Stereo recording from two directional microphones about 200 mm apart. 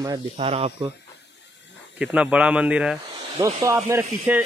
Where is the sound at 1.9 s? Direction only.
5° right (ahead or behind).